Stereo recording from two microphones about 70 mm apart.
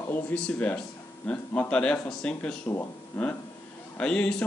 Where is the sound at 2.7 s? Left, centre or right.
Left.